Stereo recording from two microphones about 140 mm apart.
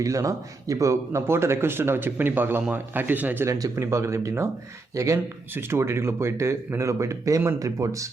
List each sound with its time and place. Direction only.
0.0 s a man's voice: 25° right (ahead or behind)